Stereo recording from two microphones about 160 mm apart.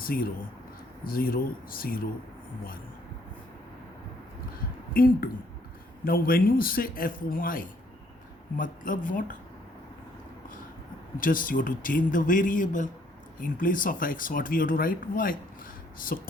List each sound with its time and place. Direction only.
0.0 s speech: 65° left (ahead or behind)
4.9 s speech: 65° left (ahead or behind)
11.2 s speech: 60° left (ahead or behind)